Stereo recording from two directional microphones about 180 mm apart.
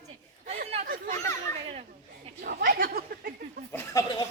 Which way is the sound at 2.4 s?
55° right (ahead or behind).